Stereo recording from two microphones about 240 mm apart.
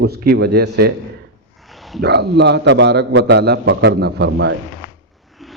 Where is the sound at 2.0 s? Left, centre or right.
Right.